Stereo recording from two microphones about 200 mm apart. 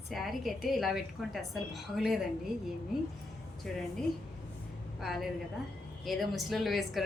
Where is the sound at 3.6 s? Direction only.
Centre (ahead or behind).